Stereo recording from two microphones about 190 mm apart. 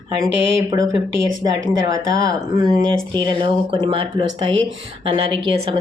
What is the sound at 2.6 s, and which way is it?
Speech, 25° right (ahead or behind).